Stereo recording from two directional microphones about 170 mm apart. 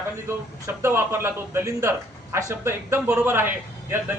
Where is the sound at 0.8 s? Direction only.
15° right (ahead or behind).